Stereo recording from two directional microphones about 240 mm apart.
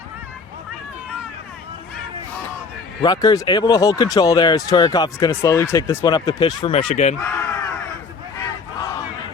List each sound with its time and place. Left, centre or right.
3.0 s speech: centre
7.2 s a sound: centre
8.4 s battle cry: centre